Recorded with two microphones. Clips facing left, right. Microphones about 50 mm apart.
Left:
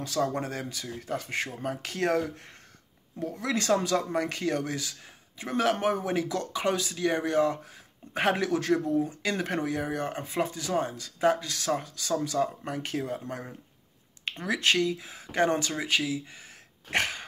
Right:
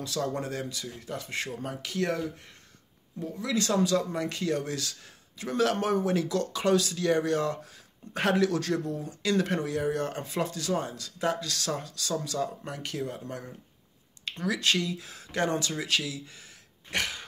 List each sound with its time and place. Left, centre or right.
0.0 s speech: left
3.3 s speech: left
3.5 s speech: left
15.0 s speech: centre
16.9 s speech: left